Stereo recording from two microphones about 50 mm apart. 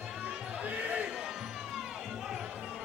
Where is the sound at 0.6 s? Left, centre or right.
Right.